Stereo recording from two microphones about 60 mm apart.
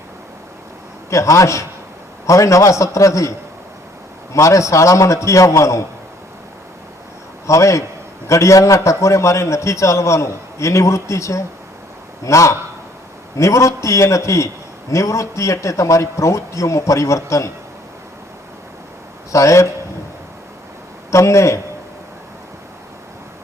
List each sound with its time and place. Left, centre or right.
1.1 s a man's voice: left
7.4 s a man's voice: left
19.3 s a man's voice: left
21.1 s a man's voice: left